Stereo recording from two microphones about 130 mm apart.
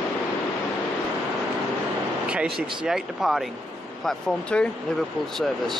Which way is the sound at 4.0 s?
10° left (ahead or behind).